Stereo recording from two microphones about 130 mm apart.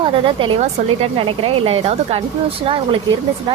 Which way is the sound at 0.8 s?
60° right (ahead or behind).